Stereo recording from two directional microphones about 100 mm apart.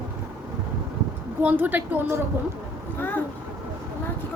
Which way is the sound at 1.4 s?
15° right (ahead or behind).